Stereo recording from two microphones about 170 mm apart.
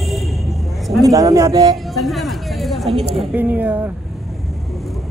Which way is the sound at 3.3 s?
10° right (ahead or behind).